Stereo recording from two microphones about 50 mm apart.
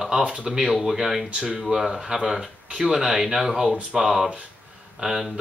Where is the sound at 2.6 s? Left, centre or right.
Right.